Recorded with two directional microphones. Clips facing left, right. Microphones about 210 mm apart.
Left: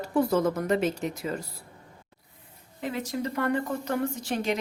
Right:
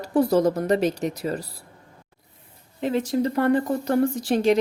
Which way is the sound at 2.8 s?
30° right (ahead or behind).